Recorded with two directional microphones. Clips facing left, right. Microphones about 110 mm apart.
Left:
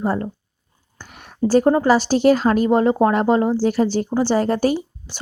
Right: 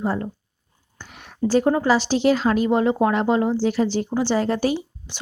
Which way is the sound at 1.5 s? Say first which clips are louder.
Left 3 dB; 40° left (ahead or behind).